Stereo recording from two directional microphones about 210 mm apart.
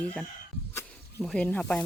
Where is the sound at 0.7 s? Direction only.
5° left (ahead or behind).